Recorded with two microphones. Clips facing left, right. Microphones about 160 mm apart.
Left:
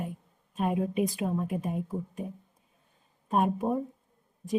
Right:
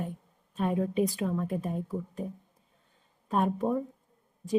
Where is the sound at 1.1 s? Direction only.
20° left (ahead or behind).